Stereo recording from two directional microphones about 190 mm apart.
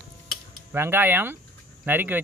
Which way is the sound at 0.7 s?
10° right (ahead or behind).